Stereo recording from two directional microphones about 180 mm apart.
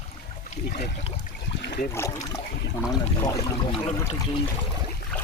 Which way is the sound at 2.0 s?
15° left (ahead or behind).